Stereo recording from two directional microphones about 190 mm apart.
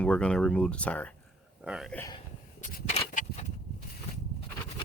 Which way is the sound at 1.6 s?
5° right (ahead or behind).